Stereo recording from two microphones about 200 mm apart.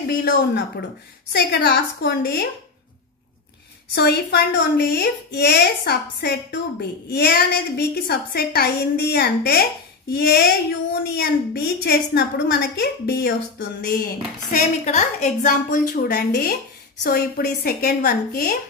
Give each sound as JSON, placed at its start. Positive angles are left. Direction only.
{"t": 1.3, "sound": "a woman's voice", "side_deg": 55}
{"t": 3.9, "sound": "a woman's voice", "side_deg": 55}